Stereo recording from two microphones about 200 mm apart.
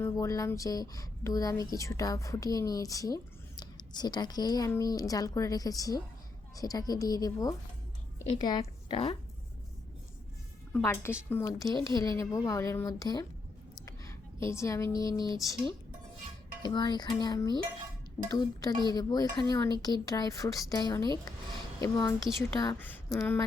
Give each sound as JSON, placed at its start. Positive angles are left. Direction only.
{"t": 0.0, "sound": "a woman's voice", "side_deg": 15}
{"t": 10.7, "sound": "a woman's voice", "side_deg": 10}
{"t": 16.6, "sound": "a woman's voice", "side_deg": 20}